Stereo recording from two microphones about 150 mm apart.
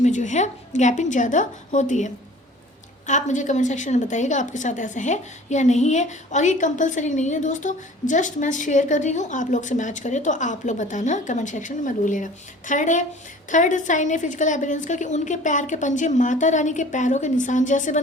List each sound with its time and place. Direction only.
0.0 s a woman's voice: 55° left (ahead or behind)